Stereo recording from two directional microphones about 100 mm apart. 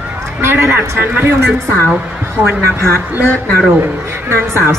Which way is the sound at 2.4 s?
15° right (ahead or behind).